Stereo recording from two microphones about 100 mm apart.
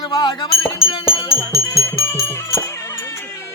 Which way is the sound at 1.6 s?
25° left (ahead or behind).